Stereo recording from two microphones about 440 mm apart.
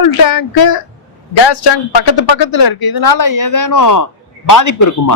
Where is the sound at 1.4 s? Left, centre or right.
Left.